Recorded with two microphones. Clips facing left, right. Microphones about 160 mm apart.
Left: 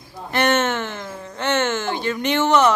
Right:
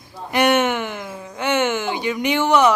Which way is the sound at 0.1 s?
10° right (ahead or behind).